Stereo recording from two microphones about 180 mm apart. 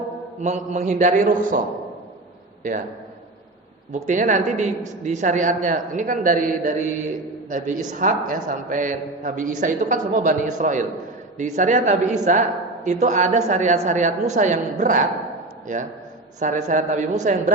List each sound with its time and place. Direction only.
0.4 s a woman's voice: 40° right (ahead or behind)
4.0 s a woman's voice: 45° right (ahead or behind)